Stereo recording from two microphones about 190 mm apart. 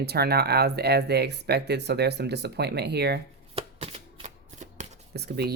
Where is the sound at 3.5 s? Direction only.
30° right (ahead or behind).